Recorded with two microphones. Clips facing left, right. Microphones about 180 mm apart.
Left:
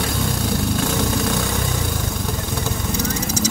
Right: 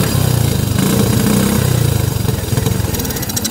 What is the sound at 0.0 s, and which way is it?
Vehicle, 90° right.